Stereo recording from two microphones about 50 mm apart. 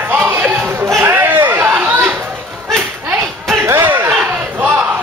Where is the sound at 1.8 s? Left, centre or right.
Right.